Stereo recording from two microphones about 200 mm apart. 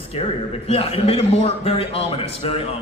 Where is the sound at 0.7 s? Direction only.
30° left (ahead or behind).